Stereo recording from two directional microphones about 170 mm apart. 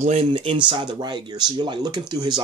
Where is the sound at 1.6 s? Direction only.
25° right (ahead or behind).